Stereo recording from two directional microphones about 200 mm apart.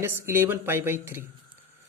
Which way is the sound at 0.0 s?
10° right (ahead or behind).